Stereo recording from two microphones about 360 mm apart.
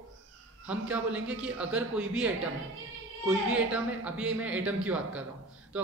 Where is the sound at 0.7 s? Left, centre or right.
Centre.